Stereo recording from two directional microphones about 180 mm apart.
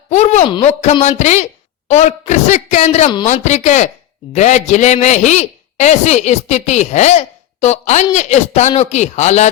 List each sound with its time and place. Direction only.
0.1 s a man's voice: 40° left (ahead or behind)